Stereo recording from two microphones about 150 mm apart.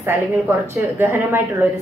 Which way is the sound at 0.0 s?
20° right (ahead or behind).